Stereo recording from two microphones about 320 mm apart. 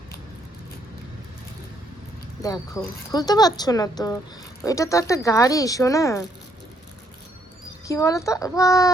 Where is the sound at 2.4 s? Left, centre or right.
Centre.